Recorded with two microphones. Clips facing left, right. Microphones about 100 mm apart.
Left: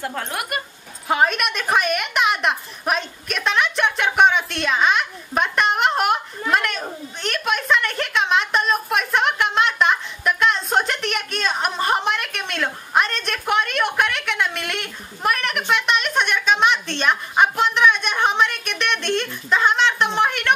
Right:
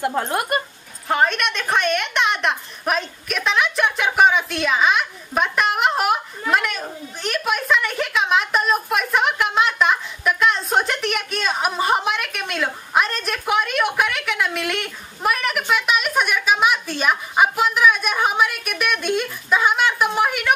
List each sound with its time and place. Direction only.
0.2 s speech: 30° right (ahead or behind)
1.0 s a woman's voice: 5° left (ahead or behind)